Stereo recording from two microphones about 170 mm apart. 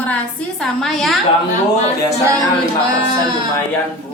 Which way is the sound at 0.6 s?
Centre (ahead or behind).